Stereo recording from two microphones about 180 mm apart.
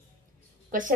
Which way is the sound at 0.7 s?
50° right (ahead or behind).